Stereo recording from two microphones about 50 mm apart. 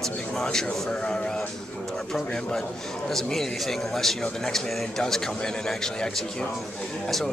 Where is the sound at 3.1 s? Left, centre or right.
Centre.